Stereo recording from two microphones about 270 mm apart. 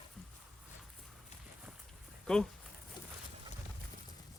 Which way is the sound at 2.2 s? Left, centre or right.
Centre.